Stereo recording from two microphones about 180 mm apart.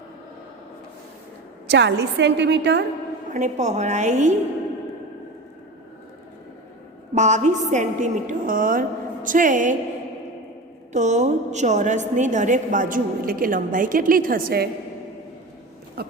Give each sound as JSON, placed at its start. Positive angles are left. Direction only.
{"t": 1.6, "sound": "a woman's voice", "side_deg": -70}
{"t": 3.2, "sound": "a woman's voice", "side_deg": -40}
{"t": 7.1, "sound": "a woman's voice", "side_deg": -40}
{"t": 10.9, "sound": "a woman's voice", "side_deg": -40}
{"t": 16.0, "sound": "a sound", "side_deg": -60}